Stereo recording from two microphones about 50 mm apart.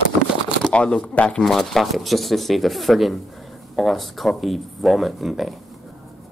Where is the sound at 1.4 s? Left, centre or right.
Centre.